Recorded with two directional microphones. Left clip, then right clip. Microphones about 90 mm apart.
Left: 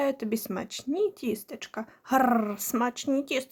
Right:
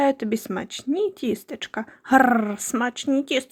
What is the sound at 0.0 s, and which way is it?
A woman's voice, 35° right (ahead or behind).